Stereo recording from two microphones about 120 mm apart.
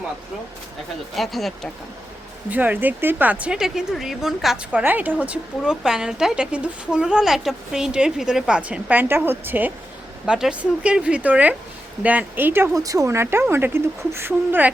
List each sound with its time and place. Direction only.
1.1 s speech: centre (ahead or behind)
2.5 s speech: 15° right (ahead or behind)